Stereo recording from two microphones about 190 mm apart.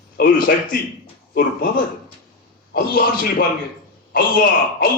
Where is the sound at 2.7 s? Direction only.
50° left (ahead or behind).